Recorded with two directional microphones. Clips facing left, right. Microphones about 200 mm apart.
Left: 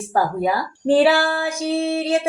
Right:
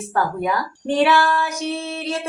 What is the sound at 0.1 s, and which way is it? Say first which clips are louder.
Speech: left 2 dB; 35° left (ahead or behind).